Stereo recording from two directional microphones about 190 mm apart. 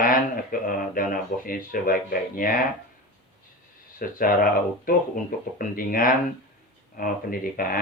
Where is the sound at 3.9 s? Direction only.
50° left (ahead or behind).